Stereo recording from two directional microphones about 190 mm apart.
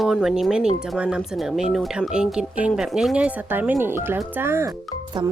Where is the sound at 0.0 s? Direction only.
Centre (ahead or behind).